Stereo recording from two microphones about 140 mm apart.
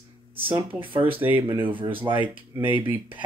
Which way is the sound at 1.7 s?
35° right (ahead or behind).